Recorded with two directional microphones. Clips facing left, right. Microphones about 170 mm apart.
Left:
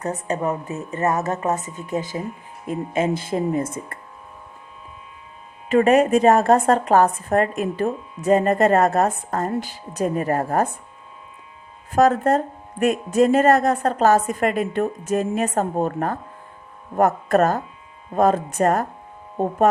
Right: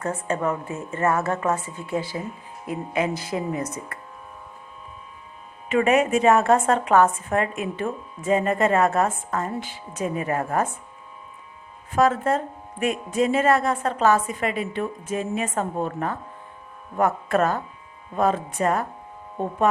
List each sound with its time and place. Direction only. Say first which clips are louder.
0.0 s speech: left 1 dB; 20° left (ahead or behind)
5.6 s a woman's voice: left 4 dB; 35° left (ahead or behind)
11.9 s a woman's voice: left 4 dB; 40° left (ahead or behind)